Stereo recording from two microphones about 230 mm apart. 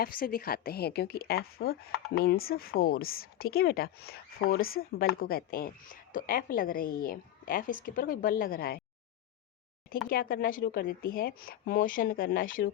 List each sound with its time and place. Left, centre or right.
0.0 s speech: left
10.1 s speech: left